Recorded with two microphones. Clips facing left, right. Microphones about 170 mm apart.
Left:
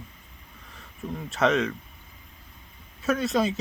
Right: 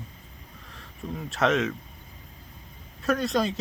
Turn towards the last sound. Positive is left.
turn(degrees=0)  # may be behind; listen again after turning